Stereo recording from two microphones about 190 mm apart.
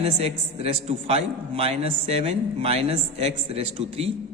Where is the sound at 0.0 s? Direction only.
30° right (ahead or behind).